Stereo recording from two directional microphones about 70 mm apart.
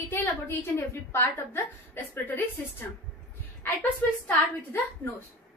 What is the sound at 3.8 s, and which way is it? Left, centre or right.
Speech, left.